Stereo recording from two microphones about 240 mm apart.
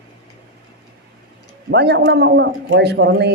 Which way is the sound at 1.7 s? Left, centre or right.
Right.